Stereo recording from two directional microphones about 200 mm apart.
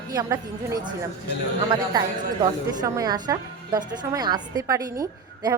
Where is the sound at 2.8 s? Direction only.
15° right (ahead or behind).